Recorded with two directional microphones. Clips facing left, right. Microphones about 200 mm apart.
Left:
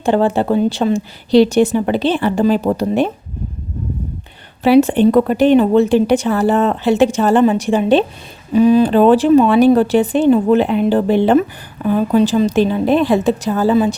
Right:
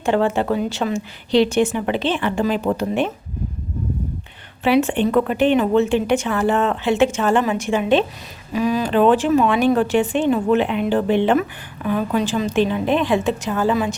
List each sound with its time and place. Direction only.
0.0 s speech: 35° left (ahead or behind)
4.6 s speech: 35° left (ahead or behind)